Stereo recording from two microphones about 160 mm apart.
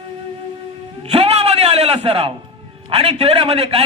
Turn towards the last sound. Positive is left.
turn(degrees=-35)  # may be behind; listen again after turning